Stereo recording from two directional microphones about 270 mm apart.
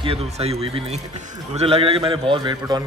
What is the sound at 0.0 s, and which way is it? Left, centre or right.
A man's voice, right.